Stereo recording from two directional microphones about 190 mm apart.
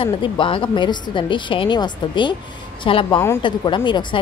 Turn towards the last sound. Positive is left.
turn(degrees=25)  # may be behind; listen again after turning